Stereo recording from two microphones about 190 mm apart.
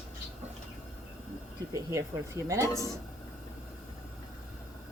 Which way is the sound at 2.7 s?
20° left (ahead or behind).